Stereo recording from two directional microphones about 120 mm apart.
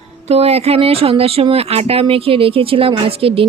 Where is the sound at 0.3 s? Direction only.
60° right (ahead or behind).